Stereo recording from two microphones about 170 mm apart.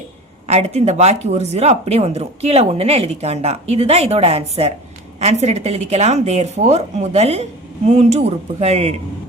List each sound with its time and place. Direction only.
0.4 s speech: 40° right (ahead or behind)